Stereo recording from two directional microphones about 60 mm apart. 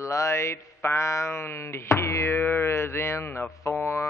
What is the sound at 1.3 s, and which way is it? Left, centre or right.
Speech, left.